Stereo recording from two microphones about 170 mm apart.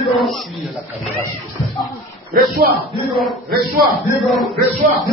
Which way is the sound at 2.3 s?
60° right (ahead or behind).